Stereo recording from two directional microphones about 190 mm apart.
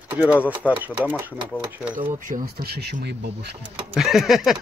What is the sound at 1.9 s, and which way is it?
Speech, 45° right (ahead or behind).